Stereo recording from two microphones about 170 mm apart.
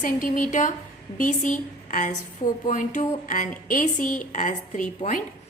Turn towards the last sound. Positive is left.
turn(degrees=50)  # may be behind; listen again after turning